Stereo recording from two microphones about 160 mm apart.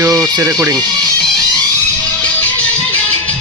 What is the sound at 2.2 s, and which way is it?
Music, 10° left (ahead or behind).